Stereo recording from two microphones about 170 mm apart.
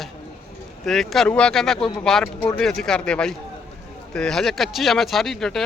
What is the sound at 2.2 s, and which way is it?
Speech, 15° left (ahead or behind).